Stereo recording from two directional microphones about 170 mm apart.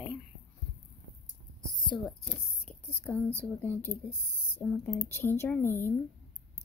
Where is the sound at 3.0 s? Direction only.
15° left (ahead or behind).